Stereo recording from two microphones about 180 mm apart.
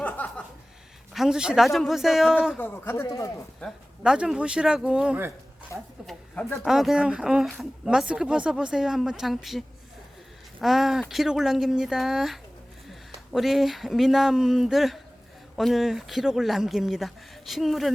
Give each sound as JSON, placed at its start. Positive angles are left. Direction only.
{"t": 0.0, "sound": "chuckle", "side_deg": 10}
{"t": 1.1, "sound": "speech", "side_deg": 0}
{"t": 2.6, "sound": "speech", "side_deg": 10}
{"t": 3.6, "sound": "speech", "side_deg": -5}
{"t": 5.7, "sound": "speech", "side_deg": 15}
{"t": 6.1, "sound": "speech", "side_deg": 0}